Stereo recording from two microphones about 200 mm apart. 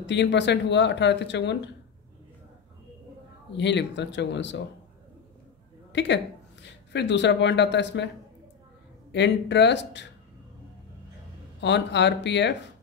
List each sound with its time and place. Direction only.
0.0 s speech: 60° left (ahead or behind)
3.5 s speech: 60° left (ahead or behind)
5.9 s speech: 60° left (ahead or behind)
9.1 s speech: 60° left (ahead or behind)
11.6 s speech: 60° left (ahead or behind)